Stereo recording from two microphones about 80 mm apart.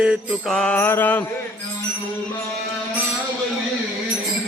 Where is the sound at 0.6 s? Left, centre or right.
Left.